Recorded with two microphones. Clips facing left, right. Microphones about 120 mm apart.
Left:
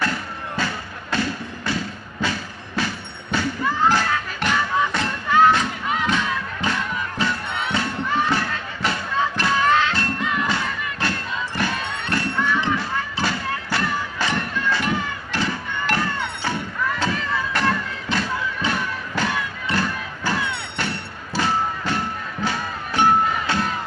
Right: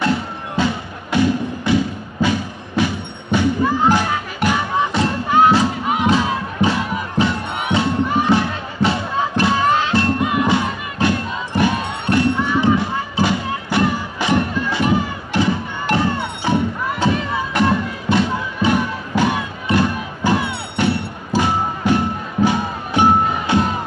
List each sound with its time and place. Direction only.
0.0 s music: 20° right (ahead or behind)
4.7 s crowd: 25° right (ahead or behind)
6.0 s music: 30° right (ahead or behind)